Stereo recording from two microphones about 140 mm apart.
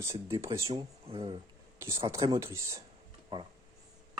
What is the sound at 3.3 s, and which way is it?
Speech, 35° right (ahead or behind).